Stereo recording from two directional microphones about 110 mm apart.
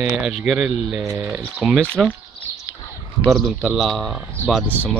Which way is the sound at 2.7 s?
20° left (ahead or behind).